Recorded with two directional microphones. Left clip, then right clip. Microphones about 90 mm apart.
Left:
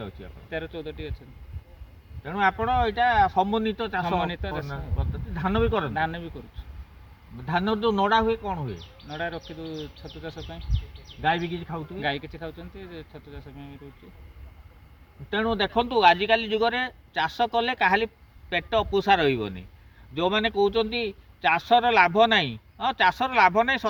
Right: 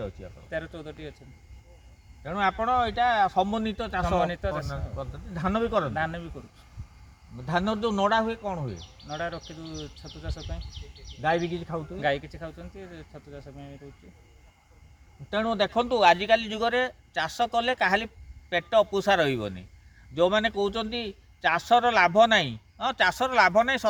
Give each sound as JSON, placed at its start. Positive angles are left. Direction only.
{"t": 0.0, "sound": "speech", "side_deg": -30}
{"t": 2.2, "sound": "speech", "side_deg": -35}
{"t": 7.3, "sound": "speech", "side_deg": -35}
{"t": 9.1, "sound": "speech", "side_deg": -25}
{"t": 9.6, "sound": "speech", "side_deg": -10}
{"t": 11.5, "sound": "speech", "side_deg": -35}
{"t": 15.3, "sound": "speech", "side_deg": -40}